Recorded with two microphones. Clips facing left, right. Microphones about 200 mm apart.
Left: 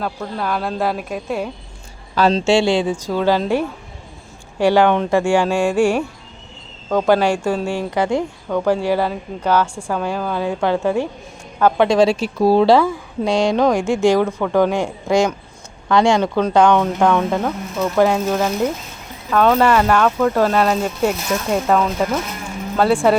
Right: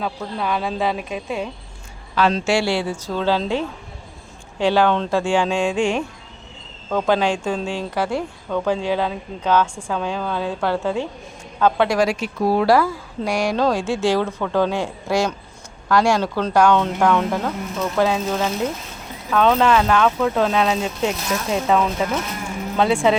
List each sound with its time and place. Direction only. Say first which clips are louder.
0.0 s speech: left 1 dB; centre (ahead or behind)
2.1 s speech: left 3 dB; 35° left (ahead or behind)
2.4 s a woman's voice: left 5 dB; 25° left (ahead or behind); by 23.1 s 5° left (ahead or behind)